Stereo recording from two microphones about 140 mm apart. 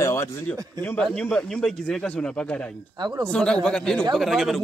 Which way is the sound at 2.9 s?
30° right (ahead or behind).